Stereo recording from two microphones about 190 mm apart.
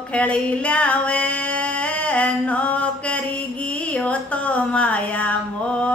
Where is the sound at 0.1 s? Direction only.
5° left (ahead or behind).